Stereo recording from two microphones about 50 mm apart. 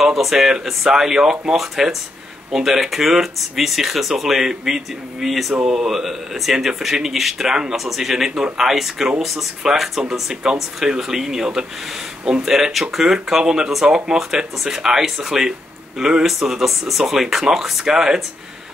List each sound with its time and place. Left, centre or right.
0.0 s speech: centre
5.5 s speech: centre